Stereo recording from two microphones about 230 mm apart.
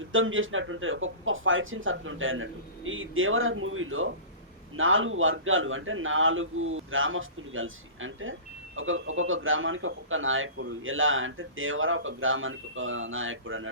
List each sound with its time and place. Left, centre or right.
0.1 s a man's voice: right